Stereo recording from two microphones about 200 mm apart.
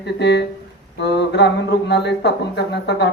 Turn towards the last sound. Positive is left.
turn(degrees=60)  # may be behind; listen again after turning